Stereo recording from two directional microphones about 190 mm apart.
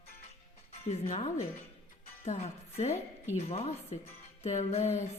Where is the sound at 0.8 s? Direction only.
35° left (ahead or behind).